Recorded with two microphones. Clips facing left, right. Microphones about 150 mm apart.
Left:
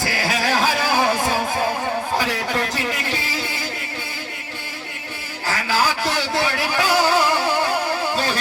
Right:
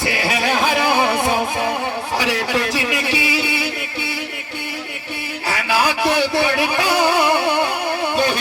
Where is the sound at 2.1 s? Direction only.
75° right (ahead or behind).